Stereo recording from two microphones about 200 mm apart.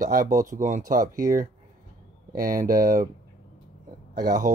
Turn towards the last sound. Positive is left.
turn(degrees=-50)  # may be behind; listen again after turning